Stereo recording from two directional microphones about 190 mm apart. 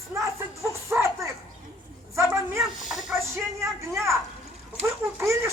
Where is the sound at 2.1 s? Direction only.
15° right (ahead or behind).